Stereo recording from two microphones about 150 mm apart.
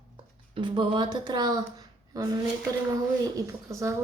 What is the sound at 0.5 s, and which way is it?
Speech, 30° right (ahead or behind).